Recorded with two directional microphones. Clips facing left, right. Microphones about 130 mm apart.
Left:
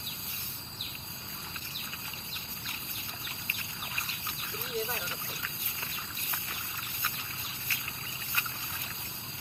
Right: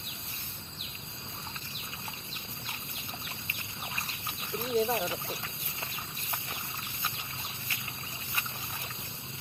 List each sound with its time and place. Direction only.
4.6 s speech: 30° right (ahead or behind)